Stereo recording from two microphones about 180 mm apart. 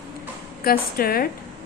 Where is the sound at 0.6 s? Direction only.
55° left (ahead or behind).